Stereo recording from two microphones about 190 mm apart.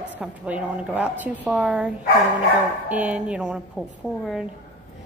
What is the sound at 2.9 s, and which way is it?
Speech, 5° right (ahead or behind).